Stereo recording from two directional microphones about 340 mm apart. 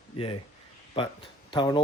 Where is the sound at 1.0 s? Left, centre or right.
Centre.